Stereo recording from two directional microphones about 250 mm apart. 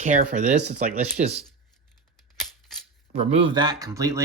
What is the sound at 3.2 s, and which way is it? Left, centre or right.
Speech, right.